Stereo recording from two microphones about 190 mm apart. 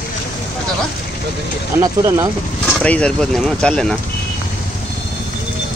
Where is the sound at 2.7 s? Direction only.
5° left (ahead or behind).